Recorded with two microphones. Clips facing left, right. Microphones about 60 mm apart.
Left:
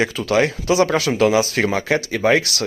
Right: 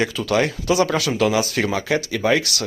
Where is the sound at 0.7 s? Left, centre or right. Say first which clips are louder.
Left 1 dB; left.